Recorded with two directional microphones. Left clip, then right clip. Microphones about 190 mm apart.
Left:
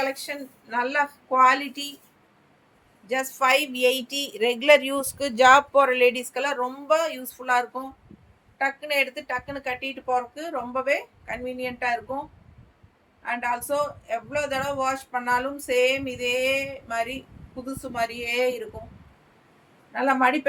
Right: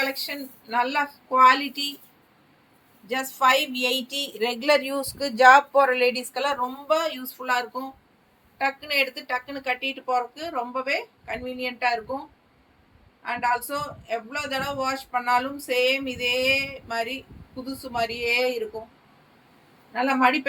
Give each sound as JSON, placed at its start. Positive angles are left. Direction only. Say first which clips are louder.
{"t": 0.7, "sound": "speech", "louder": "even", "side_deg": 20}
{"t": 3.1, "sound": "speech", "louder": "right 1 dB", "side_deg": 25}
{"t": 13.2, "sound": "speech", "louder": "right 2 dB", "side_deg": 15}
{"t": 19.9, "sound": "speech", "louder": "even", "side_deg": 20}